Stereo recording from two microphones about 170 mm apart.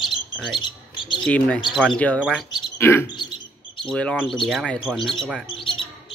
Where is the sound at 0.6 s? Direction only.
25° left (ahead or behind).